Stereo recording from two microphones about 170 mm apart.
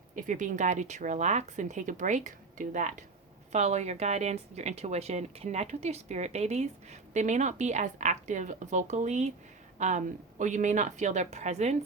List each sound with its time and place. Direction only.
0.2 s speech: 50° right (ahead or behind)